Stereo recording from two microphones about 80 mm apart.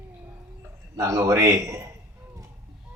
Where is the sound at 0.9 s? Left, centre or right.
Right.